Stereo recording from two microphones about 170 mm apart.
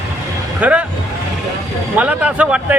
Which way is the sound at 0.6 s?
5° right (ahead or behind).